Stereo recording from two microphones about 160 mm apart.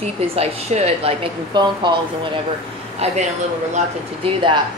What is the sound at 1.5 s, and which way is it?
Speech, 25° right (ahead or behind).